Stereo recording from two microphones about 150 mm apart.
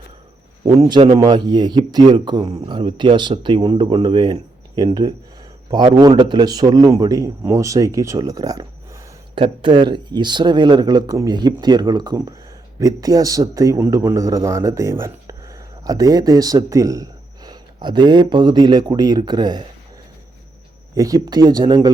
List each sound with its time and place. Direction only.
0.9 s a man's voice: 30° right (ahead or behind)
20.9 s speech: 25° right (ahead or behind)